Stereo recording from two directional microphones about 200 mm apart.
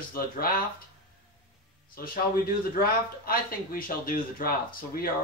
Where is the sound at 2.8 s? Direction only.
45° left (ahead or behind).